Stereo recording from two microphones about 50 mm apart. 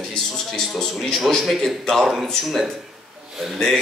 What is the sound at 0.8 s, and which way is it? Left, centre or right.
Speech, centre.